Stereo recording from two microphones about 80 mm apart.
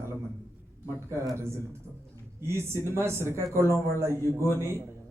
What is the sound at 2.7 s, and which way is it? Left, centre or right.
A man's voice, right.